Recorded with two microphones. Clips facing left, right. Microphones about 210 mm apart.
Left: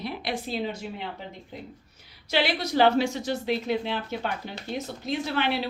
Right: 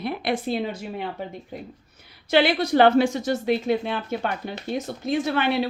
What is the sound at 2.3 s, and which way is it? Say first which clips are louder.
A woman's voice: right 7 dB; 55° right (ahead or behind).